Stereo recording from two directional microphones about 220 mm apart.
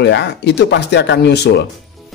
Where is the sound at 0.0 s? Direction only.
50° left (ahead or behind).